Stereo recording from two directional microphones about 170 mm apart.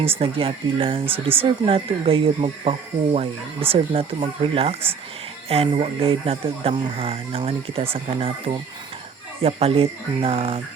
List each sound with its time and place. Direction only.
0.0 s speech: 35° right (ahead or behind)
9.4 s speech: 35° right (ahead or behind)